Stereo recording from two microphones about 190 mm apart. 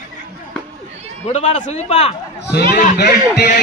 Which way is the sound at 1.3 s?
40° left (ahead or behind).